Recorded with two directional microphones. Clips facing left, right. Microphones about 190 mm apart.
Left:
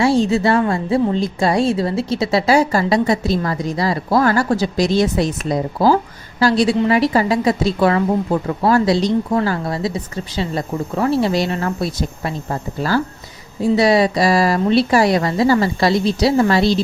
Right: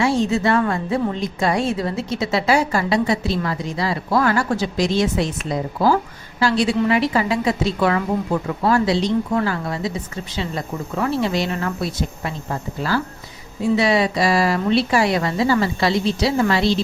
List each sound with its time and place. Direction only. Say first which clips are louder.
0.0 s a woman's voice: left 3 dB; 35° left (ahead or behind)